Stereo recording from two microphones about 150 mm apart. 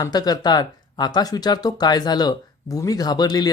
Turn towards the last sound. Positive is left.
turn(degrees=25)  # may be behind; listen again after turning